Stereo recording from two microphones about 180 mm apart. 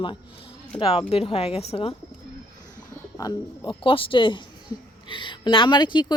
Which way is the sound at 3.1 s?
20° left (ahead or behind).